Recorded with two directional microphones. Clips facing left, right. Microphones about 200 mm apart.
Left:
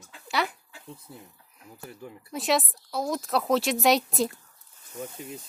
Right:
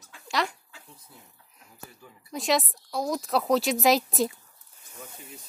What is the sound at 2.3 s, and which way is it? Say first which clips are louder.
Speech: even; centre (ahead or behind).